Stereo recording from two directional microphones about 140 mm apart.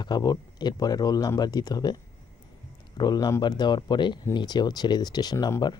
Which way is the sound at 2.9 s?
30° left (ahead or behind).